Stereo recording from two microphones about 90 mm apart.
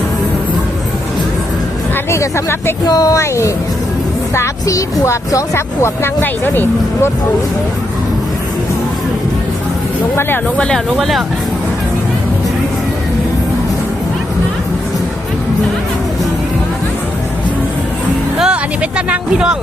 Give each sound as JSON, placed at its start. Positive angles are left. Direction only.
{"t": 2.0, "sound": "speech", "side_deg": 30}
{"t": 2.9, "sound": "speech", "side_deg": 40}
{"t": 10.2, "sound": "speech", "side_deg": 25}
{"t": 10.9, "sound": "speech", "side_deg": 0}
{"t": 18.3, "sound": "speech", "side_deg": -10}